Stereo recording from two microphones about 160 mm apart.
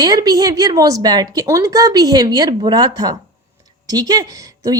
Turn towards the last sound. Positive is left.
turn(degrees=-20)  # may be behind; listen again after turning